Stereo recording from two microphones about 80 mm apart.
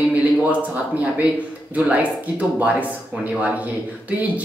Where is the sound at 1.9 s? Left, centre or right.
Centre.